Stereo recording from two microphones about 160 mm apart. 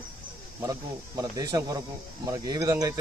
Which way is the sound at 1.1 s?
20° right (ahead or behind).